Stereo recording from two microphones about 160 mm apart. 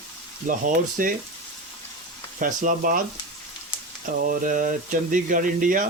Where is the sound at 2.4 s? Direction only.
60° right (ahead or behind).